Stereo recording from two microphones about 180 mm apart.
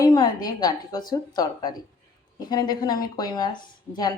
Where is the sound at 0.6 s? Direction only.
20° left (ahead or behind).